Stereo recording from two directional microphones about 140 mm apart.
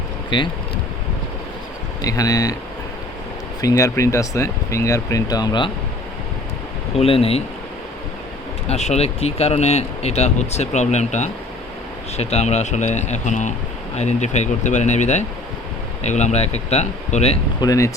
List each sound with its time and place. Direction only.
0.3 s speech: 35° left (ahead or behind)
2.0 s speech: 25° left (ahead or behind)
3.6 s speech: 25° left (ahead or behind)
6.9 s speech: 45° left (ahead or behind)
8.6 s speech: 50° left (ahead or behind)
17.6 s speech: 25° left (ahead or behind)